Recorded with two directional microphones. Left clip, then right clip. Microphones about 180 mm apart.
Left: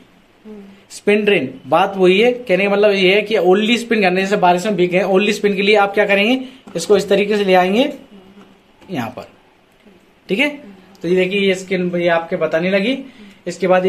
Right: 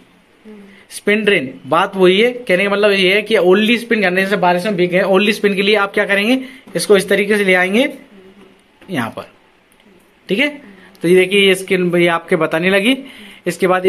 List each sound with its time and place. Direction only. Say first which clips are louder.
0.8 s a man's voice: even; 15° right (ahead or behind)
10.2 s speech: right 1 dB; 10° right (ahead or behind)
11.0 s speech: right 5 dB; 25° right (ahead or behind)
11.3 s a man's voice: right 5 dB; 35° right (ahead or behind)